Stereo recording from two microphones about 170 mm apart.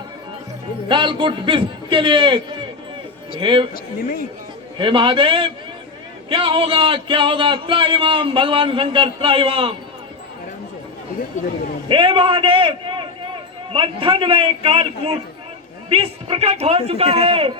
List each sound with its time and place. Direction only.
0.9 s a man's voice: 30° right (ahead or behind)
4.8 s speech: 30° right (ahead or behind)
11.9 s a man's voice: 30° right (ahead or behind)